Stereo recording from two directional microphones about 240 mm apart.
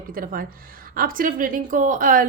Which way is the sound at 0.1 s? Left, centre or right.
Right.